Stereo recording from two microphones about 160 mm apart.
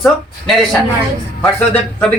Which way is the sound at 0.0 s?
Centre (ahead or behind).